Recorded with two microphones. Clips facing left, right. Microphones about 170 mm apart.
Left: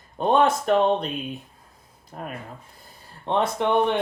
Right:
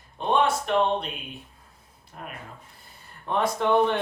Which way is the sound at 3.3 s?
25° left (ahead or behind).